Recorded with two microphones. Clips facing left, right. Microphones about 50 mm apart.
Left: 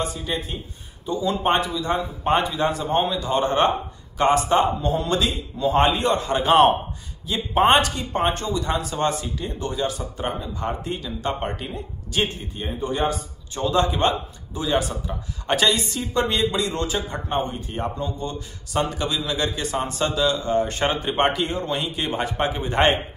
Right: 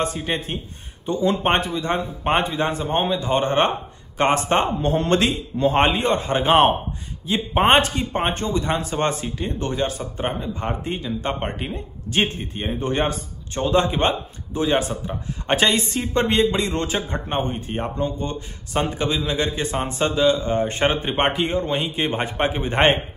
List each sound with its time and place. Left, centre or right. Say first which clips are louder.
0.0 s a man's voice: right 3 dB; right